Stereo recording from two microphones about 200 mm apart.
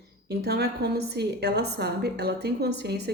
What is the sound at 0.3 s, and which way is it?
A woman's voice, 50° right (ahead or behind).